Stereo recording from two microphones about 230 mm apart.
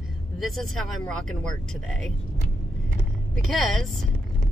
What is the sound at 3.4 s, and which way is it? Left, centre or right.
Speech, centre.